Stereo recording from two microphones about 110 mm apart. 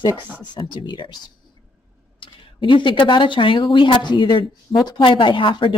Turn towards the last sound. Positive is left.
turn(degrees=50)  # may be behind; listen again after turning